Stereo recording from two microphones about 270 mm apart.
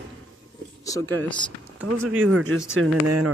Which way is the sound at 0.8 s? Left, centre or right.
Centre.